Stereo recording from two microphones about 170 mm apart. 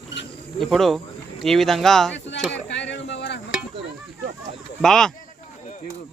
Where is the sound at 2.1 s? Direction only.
90° left.